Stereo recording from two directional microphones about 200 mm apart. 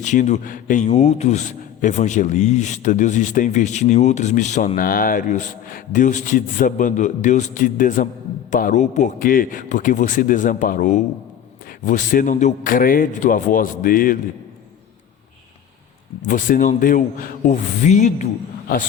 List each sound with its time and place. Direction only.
0.0 s a man's voice: 35° left (ahead or behind)
16.2 s a man's voice: 40° left (ahead or behind)